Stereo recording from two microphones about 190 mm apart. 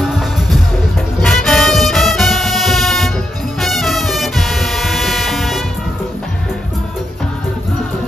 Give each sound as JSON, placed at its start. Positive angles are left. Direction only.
{"t": 0.0, "sound": "music", "side_deg": 0}